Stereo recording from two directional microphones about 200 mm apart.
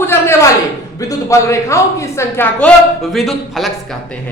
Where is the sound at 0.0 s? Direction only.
15° left (ahead or behind).